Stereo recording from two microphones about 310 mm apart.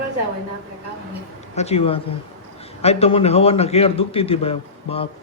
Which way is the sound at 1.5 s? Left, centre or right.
Left.